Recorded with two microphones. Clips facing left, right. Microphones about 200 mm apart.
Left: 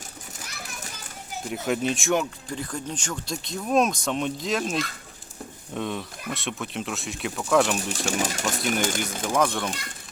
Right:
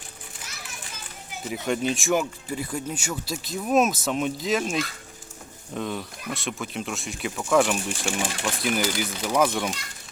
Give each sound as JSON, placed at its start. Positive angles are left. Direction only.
{"t": 1.5, "sound": "speech", "side_deg": 0}
{"t": 8.1, "sound": "speech", "side_deg": 40}
{"t": 8.4, "sound": "speech", "side_deg": 0}